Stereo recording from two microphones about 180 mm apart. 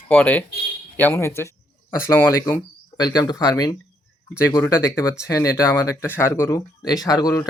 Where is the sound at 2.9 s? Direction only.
20° left (ahead or behind).